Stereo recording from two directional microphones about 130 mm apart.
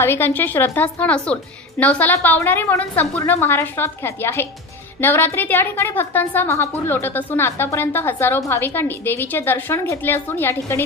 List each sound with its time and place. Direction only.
0.0 s a woman's voice: 15° left (ahead or behind)